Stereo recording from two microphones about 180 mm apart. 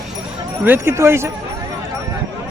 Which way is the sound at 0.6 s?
10° right (ahead or behind).